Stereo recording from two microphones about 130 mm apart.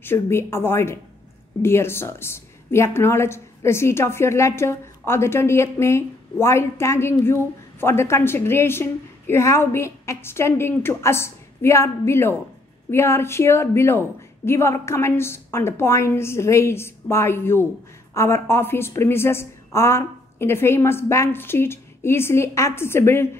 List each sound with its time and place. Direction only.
0.0 s speech: 20° left (ahead or behind)